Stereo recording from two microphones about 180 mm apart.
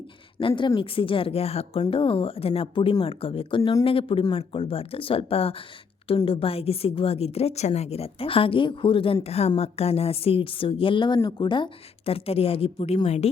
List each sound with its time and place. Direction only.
0.3 s speech: 25° left (ahead or behind)